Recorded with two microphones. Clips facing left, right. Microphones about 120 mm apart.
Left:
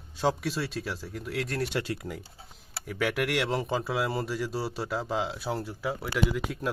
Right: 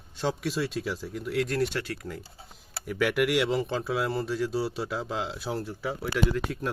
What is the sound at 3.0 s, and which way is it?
Speech, 5° right (ahead or behind).